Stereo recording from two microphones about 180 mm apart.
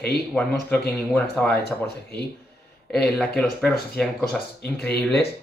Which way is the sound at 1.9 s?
65° left (ahead or behind).